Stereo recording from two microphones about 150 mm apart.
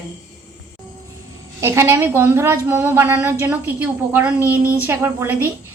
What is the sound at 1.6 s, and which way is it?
A woman's voice, 15° right (ahead or behind).